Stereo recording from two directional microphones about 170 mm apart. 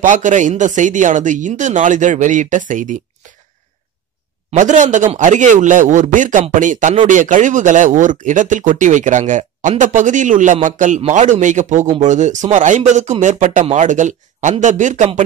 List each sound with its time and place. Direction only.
0.0 s speech: 45° right (ahead or behind)
4.5 s speech: 45° right (ahead or behind)